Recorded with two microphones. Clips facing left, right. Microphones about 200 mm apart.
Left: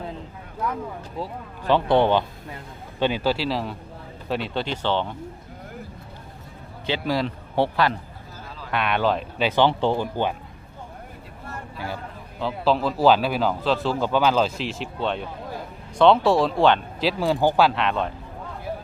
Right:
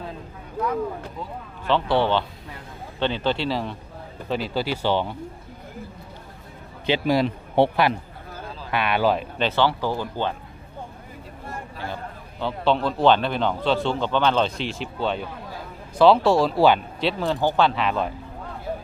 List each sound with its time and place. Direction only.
1.6 s a man's voice: 15° left (ahead or behind); by 5.1 s 10° right (ahead or behind)
6.8 s speech: 15° right (ahead or behind)
8.7 s a man's voice: 5° right (ahead or behind)
9.4 s speech: 15° left (ahead or behind)
12.4 s a man's voice: centre (ahead or behind)